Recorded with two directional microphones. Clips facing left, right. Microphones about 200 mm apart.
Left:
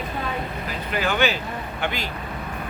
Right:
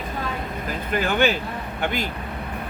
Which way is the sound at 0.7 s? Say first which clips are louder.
Right 2 dB; 50° right (ahead or behind).